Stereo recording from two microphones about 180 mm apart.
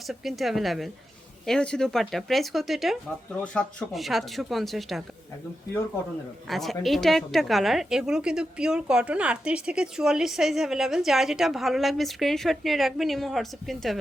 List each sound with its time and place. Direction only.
0.1 s a woman's voice: centre (ahead or behind)
6.5 s a woman's voice: centre (ahead or behind)